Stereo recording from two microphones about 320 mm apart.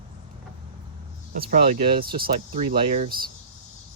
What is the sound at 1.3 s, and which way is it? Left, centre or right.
Speech, right.